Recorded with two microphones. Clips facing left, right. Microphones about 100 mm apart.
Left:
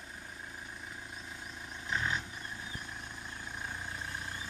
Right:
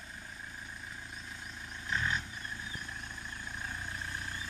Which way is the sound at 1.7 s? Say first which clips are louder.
Even; 15° left (ahead or behind).